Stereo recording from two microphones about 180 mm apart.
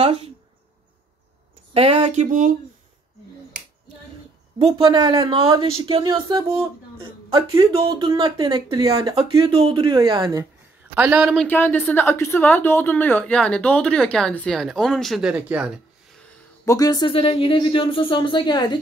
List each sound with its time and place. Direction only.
0.0 s speech: 35° right (ahead or behind)
1.7 s a woman's voice: 35° right (ahead or behind)
4.6 s a woman's voice: 30° right (ahead or behind)
11.0 s speech: 10° right (ahead or behind)
11.3 s a woman's voice: 10° left (ahead or behind); by 15.7 s 5° right (ahead or behind)
16.6 s speech: 20° left (ahead or behind)